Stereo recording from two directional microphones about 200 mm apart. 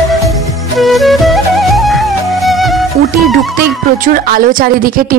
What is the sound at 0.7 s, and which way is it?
Music, centre (ahead or behind).